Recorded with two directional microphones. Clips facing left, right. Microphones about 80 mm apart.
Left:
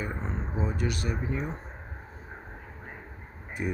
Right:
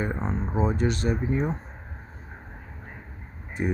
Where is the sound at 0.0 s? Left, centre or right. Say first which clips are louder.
Right 6 dB; right.